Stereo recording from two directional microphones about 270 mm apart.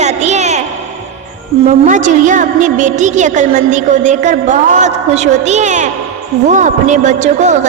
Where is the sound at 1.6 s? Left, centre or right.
Right.